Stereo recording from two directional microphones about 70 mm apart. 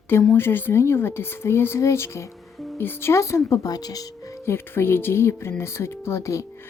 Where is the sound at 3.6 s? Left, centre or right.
Left.